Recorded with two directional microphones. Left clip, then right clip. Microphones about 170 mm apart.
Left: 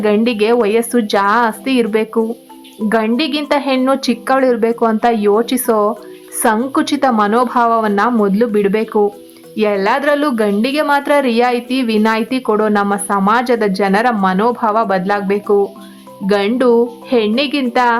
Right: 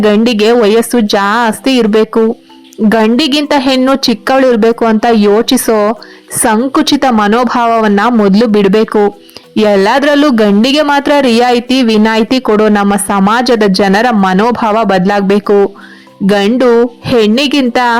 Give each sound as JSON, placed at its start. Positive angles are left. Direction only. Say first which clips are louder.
{"t": 0.0, "sound": "speech", "louder": "right 5 dB", "side_deg": -35}